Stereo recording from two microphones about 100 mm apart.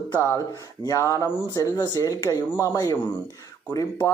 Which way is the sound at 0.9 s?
30° left (ahead or behind).